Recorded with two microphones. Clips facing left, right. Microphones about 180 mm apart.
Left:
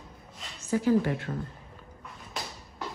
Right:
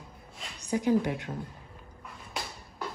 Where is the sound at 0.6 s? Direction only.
15° right (ahead or behind).